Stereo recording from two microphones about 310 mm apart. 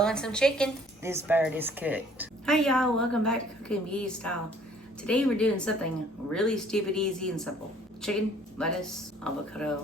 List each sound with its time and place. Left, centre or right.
0.0 s a woman's voice: centre